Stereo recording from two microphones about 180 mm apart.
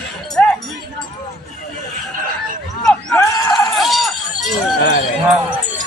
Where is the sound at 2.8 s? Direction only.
5° left (ahead or behind).